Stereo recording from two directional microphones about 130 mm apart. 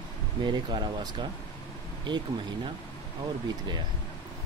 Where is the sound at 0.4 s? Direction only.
35° right (ahead or behind).